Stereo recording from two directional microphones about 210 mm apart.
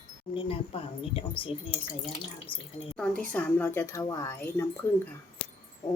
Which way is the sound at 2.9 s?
5° left (ahead or behind).